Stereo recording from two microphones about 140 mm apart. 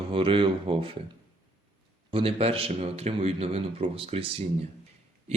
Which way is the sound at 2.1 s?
40° right (ahead or behind).